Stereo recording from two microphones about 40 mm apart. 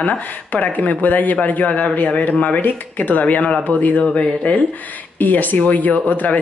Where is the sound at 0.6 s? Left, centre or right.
Left.